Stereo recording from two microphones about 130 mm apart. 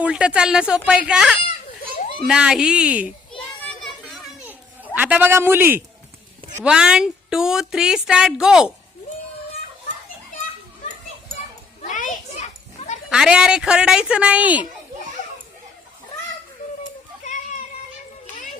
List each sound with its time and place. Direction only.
0.0 s speech: 10° right (ahead or behind)
3.6 s children playing: 5° left (ahead or behind)
4.9 s speech: 10° right (ahead or behind)
6.7 s speech: 5° right (ahead or behind)
11.8 s children playing: 90° left; by 13.0 s 65° left (ahead or behind)
13.1 s speech: 5° right (ahead or behind)